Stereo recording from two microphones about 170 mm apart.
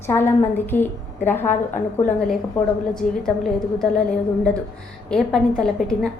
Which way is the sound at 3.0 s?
50° left (ahead or behind).